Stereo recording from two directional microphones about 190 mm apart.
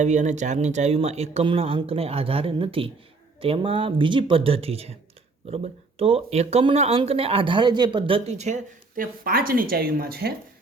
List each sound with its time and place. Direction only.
0.0 s speech: 40° right (ahead or behind); by 10.3 s 55° right (ahead or behind)